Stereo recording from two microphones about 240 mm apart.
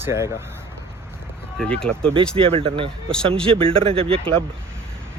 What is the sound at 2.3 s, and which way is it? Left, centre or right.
Speech, right.